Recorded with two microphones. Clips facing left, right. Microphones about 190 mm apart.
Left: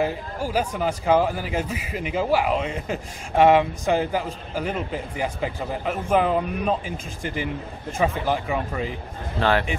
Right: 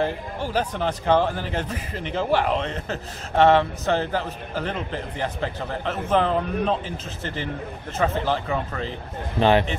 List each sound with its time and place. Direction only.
0.0 s a man's voice: 10° left (ahead or behind)
8.0 s a man's voice: 10° left (ahead or behind)
9.4 s a man's voice: 20° right (ahead or behind)